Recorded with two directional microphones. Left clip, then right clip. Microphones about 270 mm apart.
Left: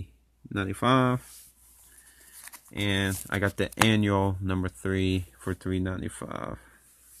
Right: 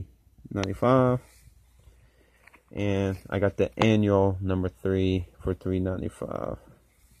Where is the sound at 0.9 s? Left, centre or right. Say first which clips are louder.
Right 2 dB; left.